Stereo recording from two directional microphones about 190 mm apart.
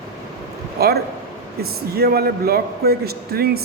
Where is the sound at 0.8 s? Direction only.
55° right (ahead or behind).